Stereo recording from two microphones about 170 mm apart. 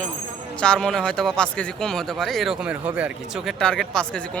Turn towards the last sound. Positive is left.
turn(degrees=5)  # may be behind; listen again after turning